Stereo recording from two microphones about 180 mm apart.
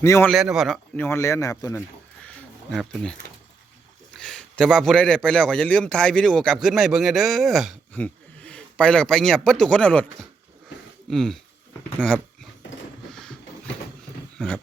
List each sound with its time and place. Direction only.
0.0 s speech: 15° left (ahead or behind)
0.3 s a man's voice: centre (ahead or behind)
0.9 s speech: 15° left (ahead or behind)
2.2 s a sound: centre (ahead or behind)
4.2 s a man's voice: 5° left (ahead or behind)
11.1 s a man's voice: centre (ahead or behind)
14.3 s a sound: 5° left (ahead or behind)